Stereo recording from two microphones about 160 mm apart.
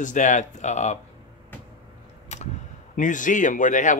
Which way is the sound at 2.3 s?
45° left (ahead or behind).